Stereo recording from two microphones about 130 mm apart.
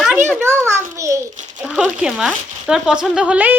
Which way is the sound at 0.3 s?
15° right (ahead or behind).